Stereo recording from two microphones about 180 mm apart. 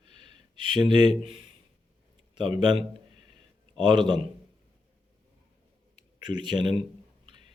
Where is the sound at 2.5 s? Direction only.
25° right (ahead or behind).